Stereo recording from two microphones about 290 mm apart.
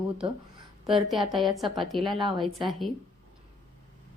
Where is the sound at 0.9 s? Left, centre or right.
Centre.